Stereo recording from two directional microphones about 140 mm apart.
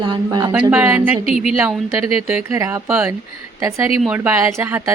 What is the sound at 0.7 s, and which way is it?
A woman's voice, 10° right (ahead or behind).